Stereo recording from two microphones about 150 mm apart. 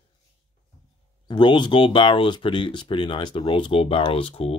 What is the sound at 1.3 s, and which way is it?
Speech, 35° left (ahead or behind).